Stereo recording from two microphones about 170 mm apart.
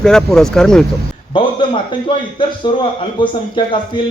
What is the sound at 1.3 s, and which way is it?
A man's voice, 30° left (ahead or behind).